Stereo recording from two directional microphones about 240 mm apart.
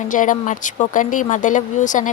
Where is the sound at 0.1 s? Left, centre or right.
Left.